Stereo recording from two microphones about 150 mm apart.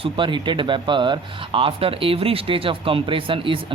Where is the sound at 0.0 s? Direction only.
35° right (ahead or behind).